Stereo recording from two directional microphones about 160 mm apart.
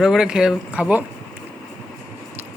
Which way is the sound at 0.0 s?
5° right (ahead or behind).